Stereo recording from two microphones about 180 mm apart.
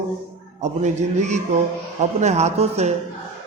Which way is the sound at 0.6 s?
40° right (ahead or behind).